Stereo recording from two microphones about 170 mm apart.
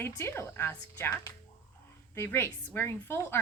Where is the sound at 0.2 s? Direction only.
15° left (ahead or behind).